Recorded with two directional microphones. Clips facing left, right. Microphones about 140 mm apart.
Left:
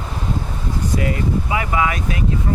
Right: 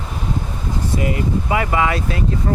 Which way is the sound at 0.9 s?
25° right (ahead or behind).